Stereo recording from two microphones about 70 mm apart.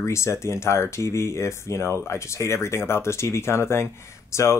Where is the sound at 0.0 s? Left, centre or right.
Left.